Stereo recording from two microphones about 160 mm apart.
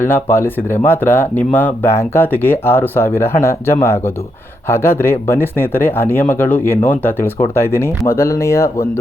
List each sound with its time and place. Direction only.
0.0 s speech: 15° left (ahead or behind)